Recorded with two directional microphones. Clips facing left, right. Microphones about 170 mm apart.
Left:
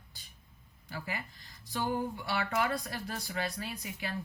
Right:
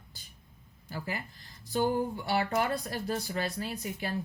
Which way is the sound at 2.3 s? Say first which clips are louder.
Right 3 dB; 35° right (ahead or behind).